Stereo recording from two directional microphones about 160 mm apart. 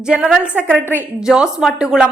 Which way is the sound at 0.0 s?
5° right (ahead or behind).